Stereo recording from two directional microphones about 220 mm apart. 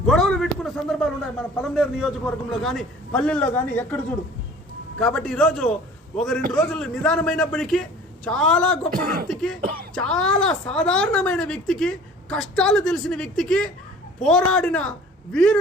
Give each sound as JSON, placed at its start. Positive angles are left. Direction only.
{"t": 0.0, "sound": "a sound", "side_deg": 0}
{"t": 1.7, "sound": "speech", "side_deg": 0}
{"t": 8.9, "sound": "speech", "side_deg": -40}
{"t": 9.2, "sound": "a woman's voice", "side_deg": 5}